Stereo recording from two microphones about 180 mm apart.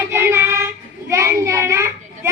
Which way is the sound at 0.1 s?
15° right (ahead or behind).